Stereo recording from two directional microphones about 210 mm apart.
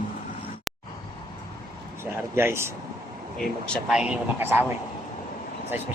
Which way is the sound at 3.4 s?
Centre (ahead or behind).